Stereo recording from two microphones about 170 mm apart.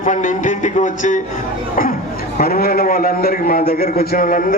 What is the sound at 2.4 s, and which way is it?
A man's voice, 60° left (ahead or behind).